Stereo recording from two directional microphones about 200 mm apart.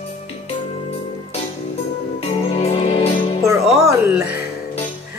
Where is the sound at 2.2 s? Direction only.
30° left (ahead or behind).